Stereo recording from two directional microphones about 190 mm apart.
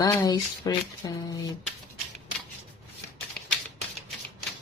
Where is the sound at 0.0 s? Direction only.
20° left (ahead or behind).